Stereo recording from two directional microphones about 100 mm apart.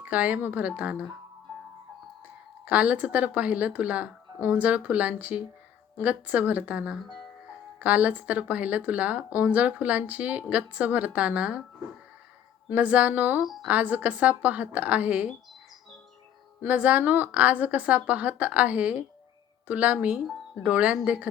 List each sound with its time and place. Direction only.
0.0 s speech: 15° right (ahead or behind)
2.6 s speech: 15° right (ahead or behind)
12.7 s speech: 15° right (ahead or behind)
13.4 s a woman's voice: 5° right (ahead or behind)
13.7 s speech: 15° right (ahead or behind)
16.6 s speech: 15° right (ahead or behind)